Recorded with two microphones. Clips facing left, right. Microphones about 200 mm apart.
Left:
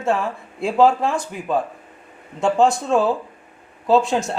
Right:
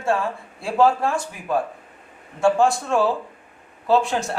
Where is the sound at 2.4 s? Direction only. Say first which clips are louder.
Left 1 dB; 20° left (ahead or behind).